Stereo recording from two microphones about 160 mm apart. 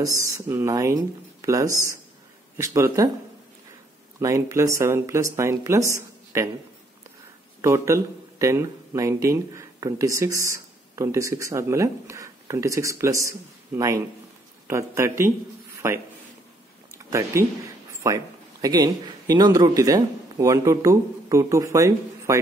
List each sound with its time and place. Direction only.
0.2 s speech: 15° right (ahead or behind)
4.2 s speech: 20° right (ahead or behind)
7.6 s speech: 15° right (ahead or behind)
16.9 s speech: 20° right (ahead or behind)